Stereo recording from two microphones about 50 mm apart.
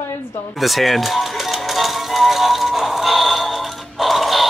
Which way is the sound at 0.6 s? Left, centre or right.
Centre.